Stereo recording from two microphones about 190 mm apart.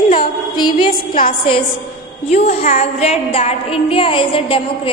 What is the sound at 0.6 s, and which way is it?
Speech, 25° left (ahead or behind).